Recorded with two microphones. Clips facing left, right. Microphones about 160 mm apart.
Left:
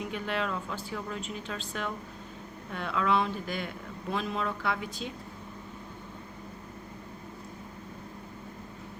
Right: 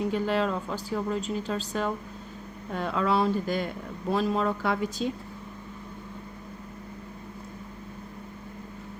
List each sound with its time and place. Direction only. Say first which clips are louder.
0.0 s speech: right 7 dB; 35° right (ahead or behind)